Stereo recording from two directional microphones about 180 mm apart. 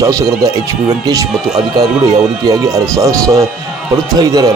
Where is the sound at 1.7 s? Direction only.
20° right (ahead or behind).